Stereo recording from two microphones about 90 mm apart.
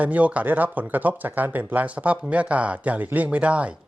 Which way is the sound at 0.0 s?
15° right (ahead or behind).